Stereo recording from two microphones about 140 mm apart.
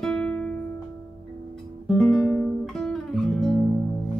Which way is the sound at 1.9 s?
5° left (ahead or behind).